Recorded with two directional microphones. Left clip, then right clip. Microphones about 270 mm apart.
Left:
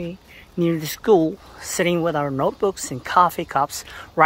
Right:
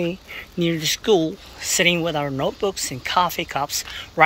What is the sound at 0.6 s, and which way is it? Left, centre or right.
Speech, centre.